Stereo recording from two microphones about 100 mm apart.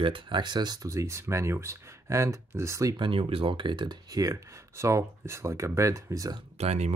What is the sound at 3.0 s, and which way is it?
Speech, 60° right (ahead or behind).